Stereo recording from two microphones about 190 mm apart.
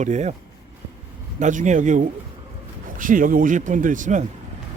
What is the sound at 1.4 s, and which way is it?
Speech, 40° right (ahead or behind).